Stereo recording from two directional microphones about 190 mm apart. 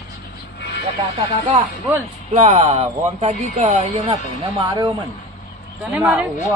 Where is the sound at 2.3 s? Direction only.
40° right (ahead or behind).